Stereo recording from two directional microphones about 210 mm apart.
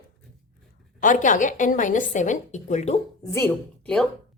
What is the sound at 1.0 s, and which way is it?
A woman's voice, 40° left (ahead or behind).